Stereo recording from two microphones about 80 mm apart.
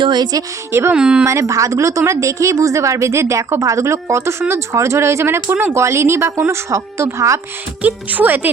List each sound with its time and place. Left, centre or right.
0.0 s a woman's voice: right
0.7 s speech: right
0.9 s speech: centre
1.2 s speech: right
7.8 s speech: right